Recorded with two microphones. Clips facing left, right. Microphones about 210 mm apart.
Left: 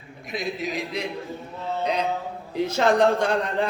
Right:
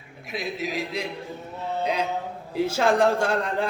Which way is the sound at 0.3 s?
5° right (ahead or behind).